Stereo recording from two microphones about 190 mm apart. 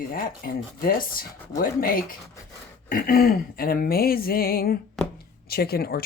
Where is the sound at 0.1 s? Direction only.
50° left (ahead or behind).